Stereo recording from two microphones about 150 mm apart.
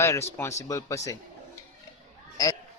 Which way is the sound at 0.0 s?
20° left (ahead or behind).